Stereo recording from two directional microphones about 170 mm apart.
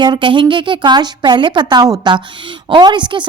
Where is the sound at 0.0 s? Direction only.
25° right (ahead or behind).